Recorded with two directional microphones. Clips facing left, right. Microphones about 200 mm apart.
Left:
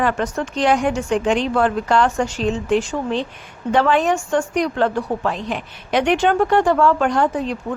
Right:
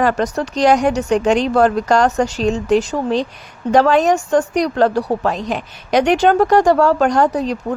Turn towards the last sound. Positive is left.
turn(degrees=-40)  # may be behind; listen again after turning